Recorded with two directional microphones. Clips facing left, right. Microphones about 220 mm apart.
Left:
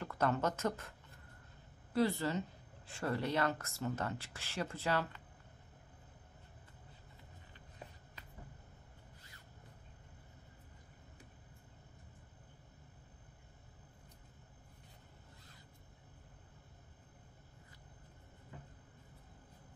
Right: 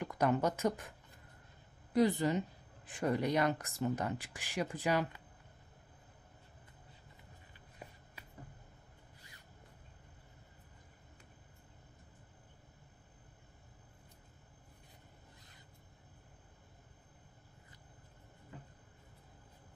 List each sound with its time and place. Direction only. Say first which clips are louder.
0.0 s speech: right 3 dB; 15° right (ahead or behind)
2.0 s speech: right 4 dB; 15° right (ahead or behind)